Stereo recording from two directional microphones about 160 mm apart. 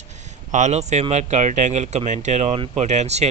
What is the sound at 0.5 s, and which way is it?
Speech, 45° right (ahead or behind).